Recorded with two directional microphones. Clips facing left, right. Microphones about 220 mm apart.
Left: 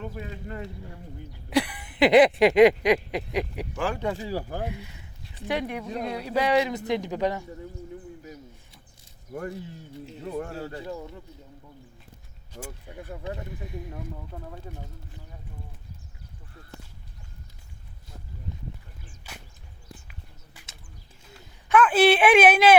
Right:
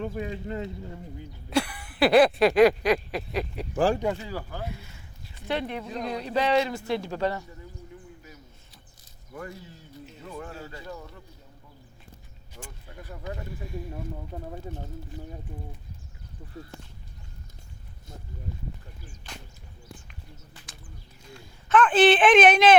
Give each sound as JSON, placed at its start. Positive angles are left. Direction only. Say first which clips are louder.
{"t": 0.1, "sound": "speech", "louder": "right 5 dB", "side_deg": -20}
{"t": 1.5, "sound": "a sound", "louder": "left 2 dB", "side_deg": 15}
{"t": 3.8, "sound": "speech", "louder": "right 6 dB", "side_deg": -30}
{"t": 4.2, "sound": "speech", "louder": "left 5 dB", "side_deg": 35}
{"t": 4.6, "sound": "a man's voice", "louder": "left 4 dB", "side_deg": 15}
{"t": 9.3, "sound": "speech", "louder": "left 5 dB", "side_deg": 45}
{"t": 10.8, "sound": "a sound", "louder": "left 4 dB", "side_deg": 20}
{"t": 12.5, "sound": "a man's voice", "louder": "left 5 dB", "side_deg": 10}
{"t": 13.2, "sound": "a sound", "louder": "right 1 dB", "side_deg": 20}
{"t": 14.3, "sound": "speech", "louder": "right 3 dB", "side_deg": -25}
{"t": 19.3, "sound": "whip", "louder": "right 1 dB", "side_deg": 5}
{"t": 20.1, "sound": "bird", "louder": "right 3 dB", "side_deg": 10}
{"t": 21.7, "sound": "a man's voice", "louder": "even", "side_deg": 10}